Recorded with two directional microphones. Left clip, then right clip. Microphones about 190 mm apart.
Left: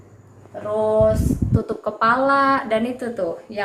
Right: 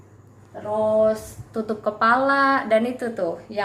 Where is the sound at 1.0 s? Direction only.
Centre (ahead or behind).